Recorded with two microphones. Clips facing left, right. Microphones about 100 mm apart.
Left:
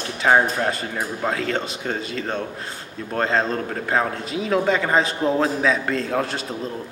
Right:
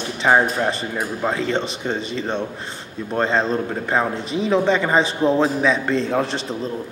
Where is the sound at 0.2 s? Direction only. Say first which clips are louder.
Right 1 dB; centre (ahead or behind).